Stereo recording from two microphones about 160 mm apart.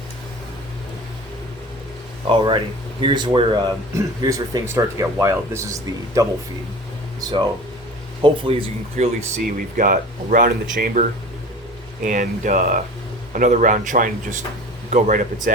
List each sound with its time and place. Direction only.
2.3 s speech: 30° right (ahead or behind)
9.8 s speech: 60° right (ahead or behind)
12.0 s speech: 55° right (ahead or behind)